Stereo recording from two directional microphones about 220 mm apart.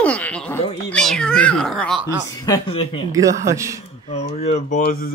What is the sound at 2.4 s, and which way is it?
Speech, 20° left (ahead or behind).